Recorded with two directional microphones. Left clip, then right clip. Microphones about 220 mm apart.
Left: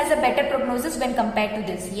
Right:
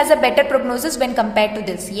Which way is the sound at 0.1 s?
40° right (ahead or behind).